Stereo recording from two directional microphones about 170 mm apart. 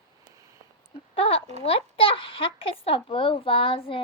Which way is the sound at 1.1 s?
35° left (ahead or behind).